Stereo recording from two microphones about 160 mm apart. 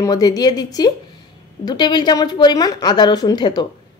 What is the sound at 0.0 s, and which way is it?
A woman's voice, 25° left (ahead or behind).